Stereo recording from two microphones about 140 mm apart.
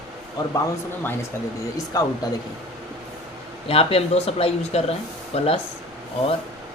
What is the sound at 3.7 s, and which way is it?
Speech, 45° left (ahead or behind).